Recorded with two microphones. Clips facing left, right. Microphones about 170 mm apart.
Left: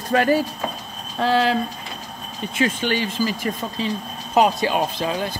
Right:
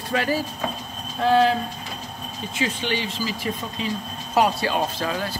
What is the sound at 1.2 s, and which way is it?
Speech, 90° left.